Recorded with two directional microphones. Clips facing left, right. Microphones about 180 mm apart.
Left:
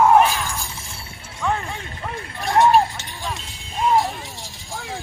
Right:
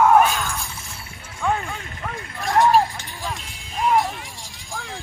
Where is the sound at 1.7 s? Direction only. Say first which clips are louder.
Left 1 dB; 30° left (ahead or behind).